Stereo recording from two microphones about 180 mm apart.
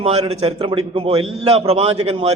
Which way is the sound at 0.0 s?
30° right (ahead or behind).